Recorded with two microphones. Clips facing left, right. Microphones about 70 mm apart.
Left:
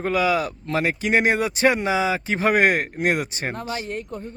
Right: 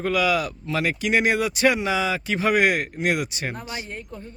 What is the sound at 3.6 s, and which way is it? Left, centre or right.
Speech, left.